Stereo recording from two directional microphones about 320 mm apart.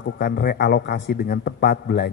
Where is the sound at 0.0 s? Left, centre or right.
Left.